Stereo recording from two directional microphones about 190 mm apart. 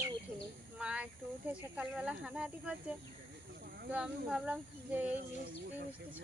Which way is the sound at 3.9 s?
5° right (ahead or behind).